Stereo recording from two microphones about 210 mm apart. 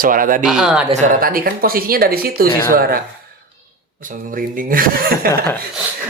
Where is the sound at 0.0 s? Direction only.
40° right (ahead or behind).